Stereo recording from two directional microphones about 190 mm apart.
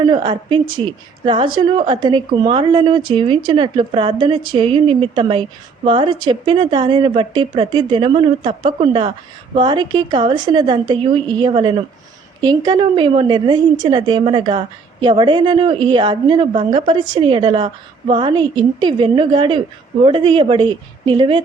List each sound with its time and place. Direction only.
0.0 s a woman's voice: 25° right (ahead or behind)